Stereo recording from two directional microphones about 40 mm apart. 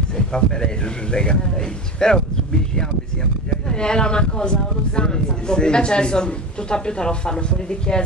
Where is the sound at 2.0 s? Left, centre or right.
Centre.